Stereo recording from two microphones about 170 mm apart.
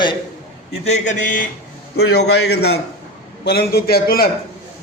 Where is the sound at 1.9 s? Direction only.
70° left (ahead or behind).